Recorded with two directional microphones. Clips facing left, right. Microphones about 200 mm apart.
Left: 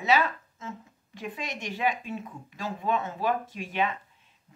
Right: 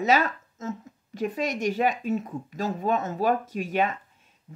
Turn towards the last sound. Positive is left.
turn(degrees=-45)  # may be behind; listen again after turning